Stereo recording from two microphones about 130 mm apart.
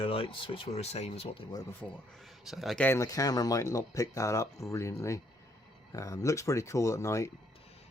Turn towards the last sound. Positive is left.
turn(degrees=25)  # may be behind; listen again after turning